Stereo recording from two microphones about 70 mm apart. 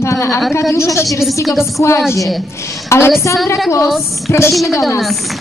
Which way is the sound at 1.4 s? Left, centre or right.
Centre.